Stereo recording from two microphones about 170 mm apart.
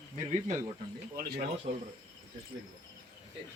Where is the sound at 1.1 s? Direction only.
65° right (ahead or behind).